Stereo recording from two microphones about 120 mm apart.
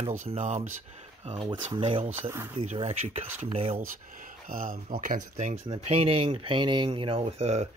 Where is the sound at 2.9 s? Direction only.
60° right (ahead or behind).